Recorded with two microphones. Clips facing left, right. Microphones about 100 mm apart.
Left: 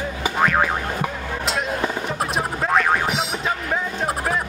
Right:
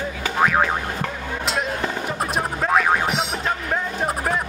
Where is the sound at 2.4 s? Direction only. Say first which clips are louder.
Right 1 dB; centre (ahead or behind).